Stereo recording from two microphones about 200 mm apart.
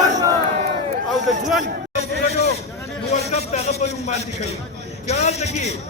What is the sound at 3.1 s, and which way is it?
A man's voice, 35° left (ahead or behind).